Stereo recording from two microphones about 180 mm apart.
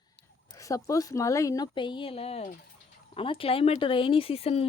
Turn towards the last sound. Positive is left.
turn(degrees=35)  # may be behind; listen again after turning